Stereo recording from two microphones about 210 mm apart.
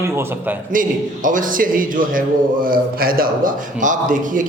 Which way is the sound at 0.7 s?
40° right (ahead or behind).